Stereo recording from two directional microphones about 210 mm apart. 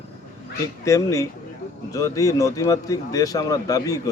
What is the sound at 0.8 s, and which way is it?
A man's voice, 15° left (ahead or behind).